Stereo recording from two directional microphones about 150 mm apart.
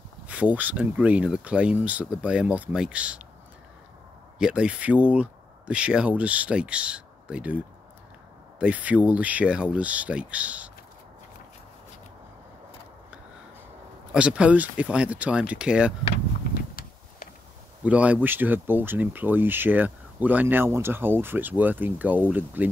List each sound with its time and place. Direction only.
0.3 s speech: 10° right (ahead or behind)
4.4 s speech: 5° right (ahead or behind)
14.1 s speech: 5° right (ahead or behind)
16.5 s a sound: 75° left (ahead or behind)
17.8 s speech: 10° right (ahead or behind)